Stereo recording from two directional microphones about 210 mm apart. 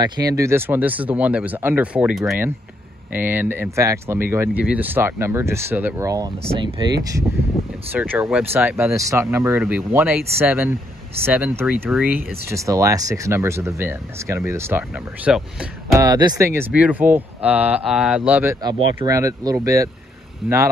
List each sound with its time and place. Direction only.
0.0 s speech: 15° right (ahead or behind)